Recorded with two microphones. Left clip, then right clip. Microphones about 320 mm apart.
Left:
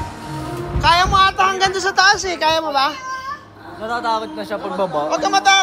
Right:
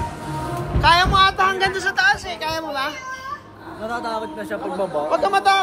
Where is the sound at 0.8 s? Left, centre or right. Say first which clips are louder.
Left 1 dB; centre.